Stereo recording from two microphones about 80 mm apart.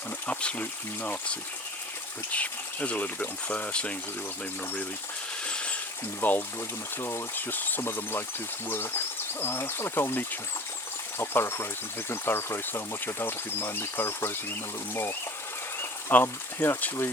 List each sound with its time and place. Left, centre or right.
0.3 s speech: centre
5.5 s a sound: centre
6.1 s speech: left
15.8 s speech: left